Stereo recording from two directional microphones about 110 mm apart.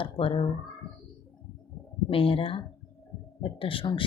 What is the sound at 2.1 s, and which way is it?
Speech, 55° left (ahead or behind).